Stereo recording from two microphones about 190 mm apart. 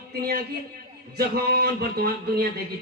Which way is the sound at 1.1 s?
55° right (ahead or behind).